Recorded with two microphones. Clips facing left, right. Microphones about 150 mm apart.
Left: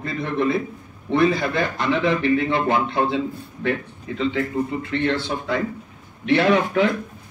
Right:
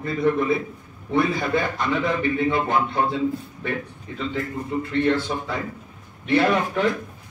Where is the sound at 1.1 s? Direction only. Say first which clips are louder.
Left 2 dB; 80° left.